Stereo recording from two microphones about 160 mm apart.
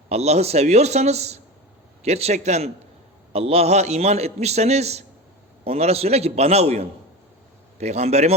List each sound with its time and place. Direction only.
0.1 s a man's voice: 40° right (ahead or behind)